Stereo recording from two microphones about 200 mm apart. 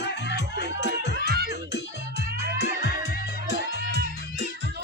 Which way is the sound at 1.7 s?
55° left (ahead or behind).